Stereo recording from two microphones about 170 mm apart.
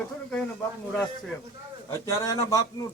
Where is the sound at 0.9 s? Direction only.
5° left (ahead or behind).